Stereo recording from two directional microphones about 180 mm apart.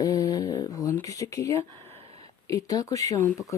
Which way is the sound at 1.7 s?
30° right (ahead or behind).